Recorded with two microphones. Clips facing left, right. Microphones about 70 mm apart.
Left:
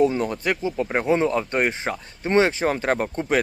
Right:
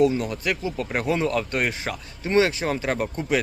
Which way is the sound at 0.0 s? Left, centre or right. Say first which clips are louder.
Left 1 dB; left.